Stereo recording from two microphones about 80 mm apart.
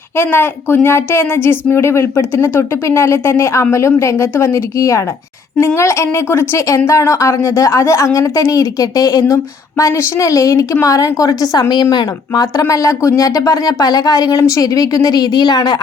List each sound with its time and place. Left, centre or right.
0.2 s a woman's voice: left
11.7 s speech: left